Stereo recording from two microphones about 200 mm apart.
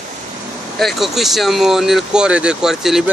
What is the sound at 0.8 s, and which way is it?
Speech, centre (ahead or behind).